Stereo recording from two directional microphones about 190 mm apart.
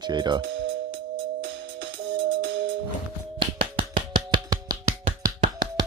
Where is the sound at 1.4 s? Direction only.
75° right (ahead or behind).